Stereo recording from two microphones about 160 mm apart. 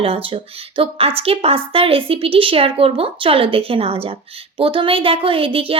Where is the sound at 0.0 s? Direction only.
35° right (ahead or behind).